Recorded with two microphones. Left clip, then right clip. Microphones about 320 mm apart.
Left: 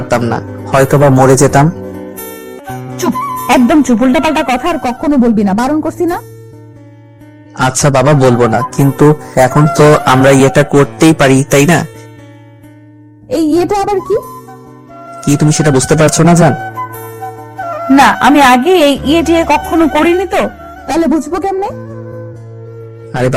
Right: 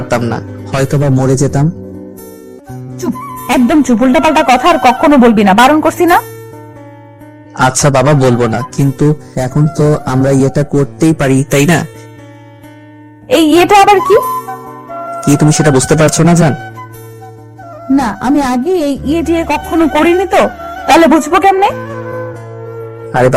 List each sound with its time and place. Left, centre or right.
0.0 s speech: centre; by 2.3 s left
2.6 s speech: left; by 6.2 s right
7.5 s speech: centre
13.2 s speech: right
23.0 s speech: centre